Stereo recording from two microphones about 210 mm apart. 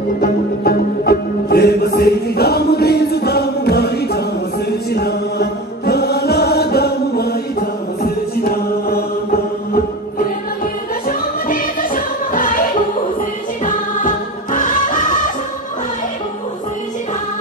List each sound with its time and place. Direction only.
0.2 s music: 45° left (ahead or behind)
13.7 s music: 40° left (ahead or behind)